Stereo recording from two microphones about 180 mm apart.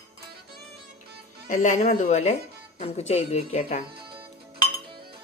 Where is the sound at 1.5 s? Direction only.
45° left (ahead or behind).